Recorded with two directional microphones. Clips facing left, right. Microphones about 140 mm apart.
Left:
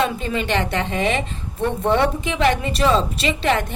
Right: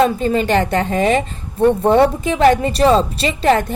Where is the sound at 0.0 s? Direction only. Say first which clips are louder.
Right 7 dB; 40° right (ahead or behind).